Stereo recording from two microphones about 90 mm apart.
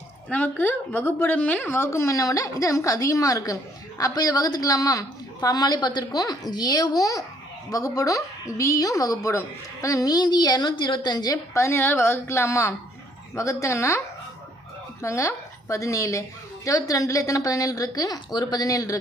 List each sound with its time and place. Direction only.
0.3 s a woman's voice: 15° left (ahead or behind); by 11.3 s 45° left (ahead or behind)
11.5 s a woman's voice: 30° left (ahead or behind)
15.0 s a woman's voice: 35° left (ahead or behind)